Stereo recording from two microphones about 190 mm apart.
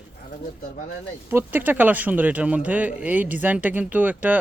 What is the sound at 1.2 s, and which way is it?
Speech, 10° right (ahead or behind).